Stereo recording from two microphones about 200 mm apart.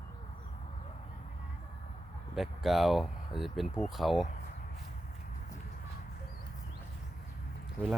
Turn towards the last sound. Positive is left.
turn(degrees=5)  # may be behind; listen again after turning